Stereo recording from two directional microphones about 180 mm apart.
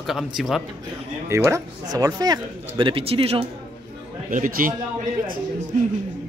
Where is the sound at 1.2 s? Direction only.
15° right (ahead or behind); by 3.5 s 30° right (ahead or behind).